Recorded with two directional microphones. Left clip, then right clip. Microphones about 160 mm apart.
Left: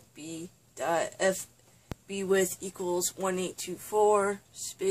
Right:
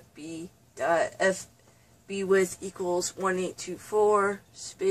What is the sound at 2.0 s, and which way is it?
Speech, 15° left (ahead or behind).